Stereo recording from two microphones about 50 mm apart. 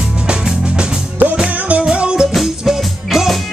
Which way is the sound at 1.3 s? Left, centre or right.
Centre.